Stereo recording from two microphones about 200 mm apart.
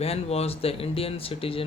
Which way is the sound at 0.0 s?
30° left (ahead or behind).